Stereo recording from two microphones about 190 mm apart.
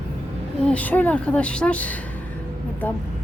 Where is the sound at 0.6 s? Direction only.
5° left (ahead or behind).